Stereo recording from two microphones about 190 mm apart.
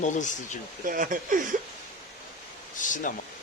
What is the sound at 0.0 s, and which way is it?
Speech, 40° left (ahead or behind).